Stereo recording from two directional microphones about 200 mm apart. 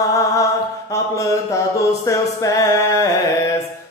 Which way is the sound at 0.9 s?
15° left (ahead or behind).